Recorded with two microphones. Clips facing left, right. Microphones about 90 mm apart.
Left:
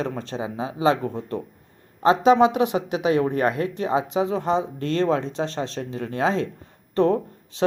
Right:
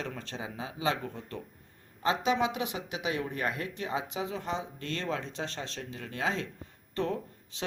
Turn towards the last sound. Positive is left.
turn(degrees=45)  # may be behind; listen again after turning